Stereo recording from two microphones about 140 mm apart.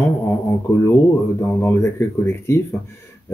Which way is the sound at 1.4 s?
20° left (ahead or behind).